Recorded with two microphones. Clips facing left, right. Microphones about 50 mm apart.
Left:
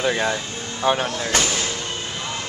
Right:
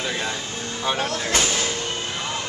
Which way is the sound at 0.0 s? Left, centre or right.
Left.